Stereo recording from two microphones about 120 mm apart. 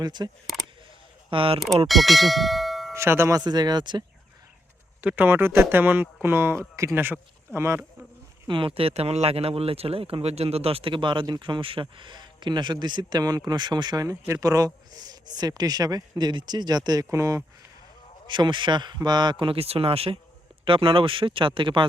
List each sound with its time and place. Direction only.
0.0 s speech: 35° right (ahead or behind)
1.3 s speech: 45° right (ahead or behind)
1.5 s speech: centre (ahead or behind)
2.9 s speech: 20° right (ahead or behind); by 4.0 s 40° right (ahead or behind)
4.9 s a man's voice: 15° right (ahead or behind)
8.4 s speech: 45° right (ahead or behind); by 17.4 s 25° right (ahead or behind)
18.3 s speech: 40° right (ahead or behind)